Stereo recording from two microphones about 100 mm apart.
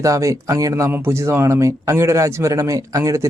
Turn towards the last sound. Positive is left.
turn(degrees=-30)  # may be behind; listen again after turning